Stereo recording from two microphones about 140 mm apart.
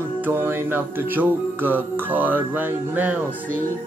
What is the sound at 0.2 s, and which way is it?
Speech, 15° right (ahead or behind).